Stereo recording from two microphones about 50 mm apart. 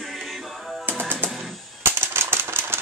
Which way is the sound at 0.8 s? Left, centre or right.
Right.